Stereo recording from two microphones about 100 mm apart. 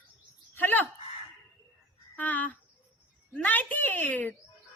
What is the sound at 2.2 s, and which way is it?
A woman's voice, 15° left (ahead or behind).